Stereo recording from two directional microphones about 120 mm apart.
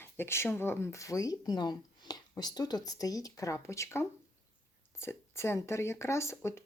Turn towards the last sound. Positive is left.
turn(degrees=25)  # may be behind; listen again after turning